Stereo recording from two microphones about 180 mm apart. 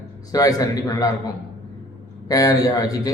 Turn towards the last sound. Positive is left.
turn(degrees=20)  # may be behind; listen again after turning